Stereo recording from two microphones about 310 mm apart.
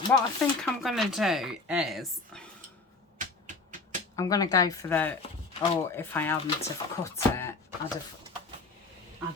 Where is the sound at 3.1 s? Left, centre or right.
Right.